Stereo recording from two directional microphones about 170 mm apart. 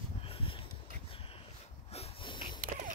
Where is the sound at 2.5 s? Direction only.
55° right (ahead or behind).